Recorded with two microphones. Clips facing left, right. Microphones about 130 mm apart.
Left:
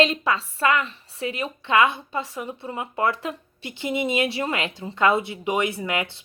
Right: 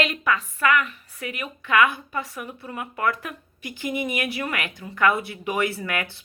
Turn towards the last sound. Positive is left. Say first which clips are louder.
# left 2 dB
turn(degrees=20)  # may be behind; listen again after turning